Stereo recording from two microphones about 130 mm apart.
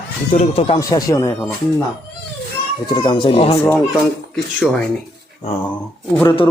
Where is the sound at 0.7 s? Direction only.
25° left (ahead or behind).